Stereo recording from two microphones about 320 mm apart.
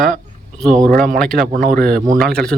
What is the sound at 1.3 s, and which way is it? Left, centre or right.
Speech, right.